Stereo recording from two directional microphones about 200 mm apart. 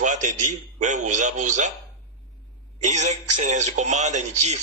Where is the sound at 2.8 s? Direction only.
35° right (ahead or behind).